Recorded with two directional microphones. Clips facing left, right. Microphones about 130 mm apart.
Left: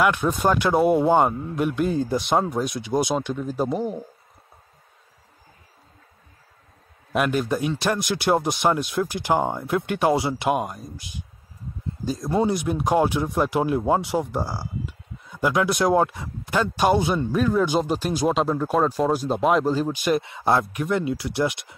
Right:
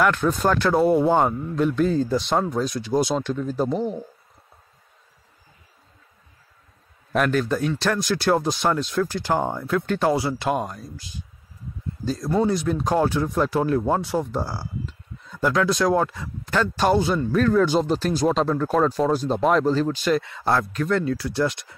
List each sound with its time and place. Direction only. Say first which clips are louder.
0.0 s speech: even; 10° left (ahead or behind)
7.1 s speech: right 1 dB; 10° left (ahead or behind)